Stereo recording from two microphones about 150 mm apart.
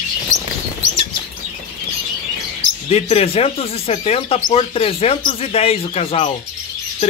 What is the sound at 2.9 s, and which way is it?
Speech, 45° left (ahead or behind).